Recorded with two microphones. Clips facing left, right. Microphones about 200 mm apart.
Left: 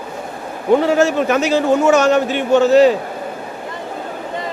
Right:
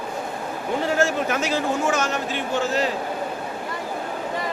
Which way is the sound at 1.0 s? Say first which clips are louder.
Left 7 dB; 70° left (ahead or behind).